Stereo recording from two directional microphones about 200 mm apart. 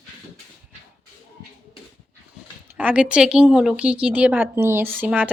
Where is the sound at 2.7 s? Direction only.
5° right (ahead or behind).